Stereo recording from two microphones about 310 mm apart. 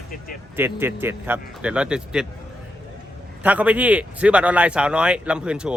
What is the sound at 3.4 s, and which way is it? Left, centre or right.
Speech, centre.